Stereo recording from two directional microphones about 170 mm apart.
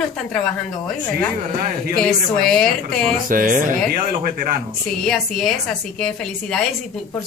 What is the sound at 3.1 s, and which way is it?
Speech, 55° right (ahead or behind).